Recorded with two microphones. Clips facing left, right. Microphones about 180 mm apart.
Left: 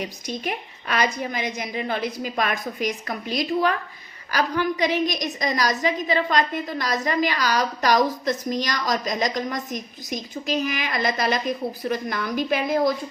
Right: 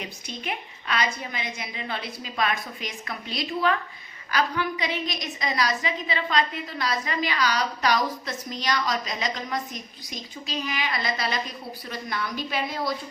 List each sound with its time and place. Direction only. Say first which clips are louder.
0.0 s a woman's voice: left 6 dB; 40° left (ahead or behind)